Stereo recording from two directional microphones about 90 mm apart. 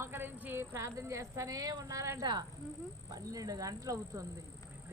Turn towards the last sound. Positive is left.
turn(degrees=-35)  # may be behind; listen again after turning